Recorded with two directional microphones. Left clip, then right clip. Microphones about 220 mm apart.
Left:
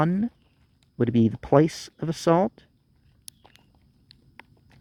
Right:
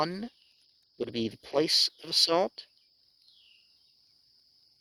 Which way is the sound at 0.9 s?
20° right (ahead or behind).